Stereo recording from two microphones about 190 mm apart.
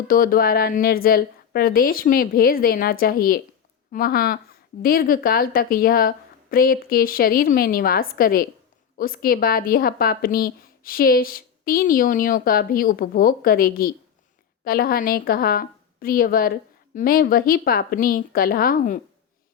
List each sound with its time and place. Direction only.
0.1 s a woman's voice: 50° left (ahead or behind)